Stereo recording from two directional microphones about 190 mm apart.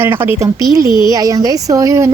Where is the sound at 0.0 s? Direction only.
15° right (ahead or behind).